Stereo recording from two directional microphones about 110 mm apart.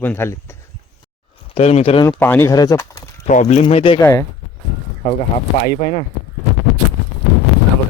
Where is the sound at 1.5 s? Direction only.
70° left (ahead or behind).